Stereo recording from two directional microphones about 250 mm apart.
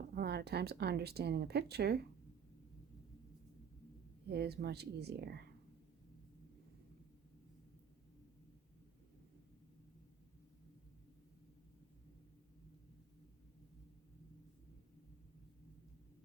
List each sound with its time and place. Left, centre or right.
0.1 s speech: right
4.3 s speech: right